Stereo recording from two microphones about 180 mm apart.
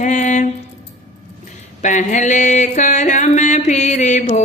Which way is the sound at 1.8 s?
40° left (ahead or behind).